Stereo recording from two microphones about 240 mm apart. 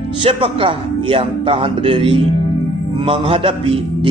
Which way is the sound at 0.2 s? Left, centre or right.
Right.